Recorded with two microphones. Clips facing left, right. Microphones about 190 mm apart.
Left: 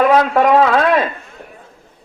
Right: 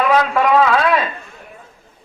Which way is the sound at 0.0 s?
45° left (ahead or behind).